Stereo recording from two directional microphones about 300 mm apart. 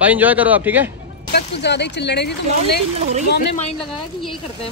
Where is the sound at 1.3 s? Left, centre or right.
Left.